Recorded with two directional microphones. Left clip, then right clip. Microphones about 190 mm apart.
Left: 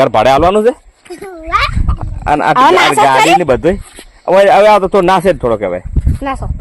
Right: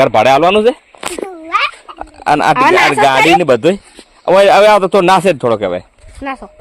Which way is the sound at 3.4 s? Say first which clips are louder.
Right 1 dB; 10° right (ahead or behind).